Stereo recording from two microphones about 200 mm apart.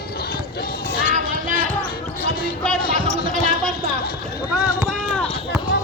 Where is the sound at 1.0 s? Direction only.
40° right (ahead or behind).